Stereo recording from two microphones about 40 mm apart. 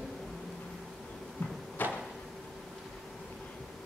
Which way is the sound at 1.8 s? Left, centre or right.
Left.